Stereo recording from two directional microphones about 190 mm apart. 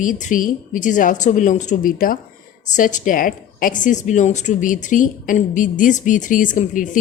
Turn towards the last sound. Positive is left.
turn(degrees=45)  # may be behind; listen again after turning